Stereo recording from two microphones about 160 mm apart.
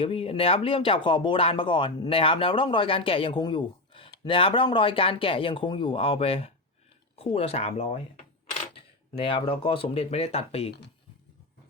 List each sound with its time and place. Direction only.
0.0 s speech: 35° left (ahead or behind)